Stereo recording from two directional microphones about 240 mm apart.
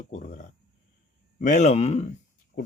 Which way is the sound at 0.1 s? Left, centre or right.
Left.